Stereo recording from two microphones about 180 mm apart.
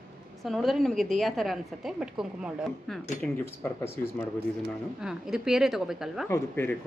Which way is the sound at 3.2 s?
5° left (ahead or behind).